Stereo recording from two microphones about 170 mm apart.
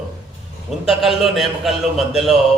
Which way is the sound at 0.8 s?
Centre (ahead or behind).